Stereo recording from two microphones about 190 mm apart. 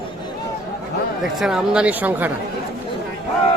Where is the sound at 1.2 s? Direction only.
Centre (ahead or behind).